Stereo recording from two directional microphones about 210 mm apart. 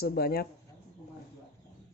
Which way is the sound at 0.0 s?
45° left (ahead or behind).